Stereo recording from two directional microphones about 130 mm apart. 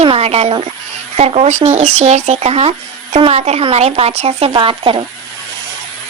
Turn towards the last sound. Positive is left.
turn(degrees=-40)  # may be behind; listen again after turning